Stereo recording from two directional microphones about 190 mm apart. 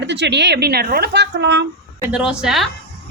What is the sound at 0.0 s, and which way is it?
A woman's voice, 65° right (ahead or behind).